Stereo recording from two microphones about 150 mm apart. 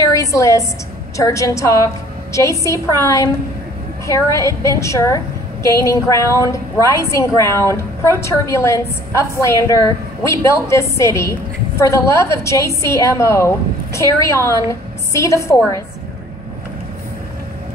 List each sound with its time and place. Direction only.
0.1 s a woman's voice: 20° left (ahead or behind)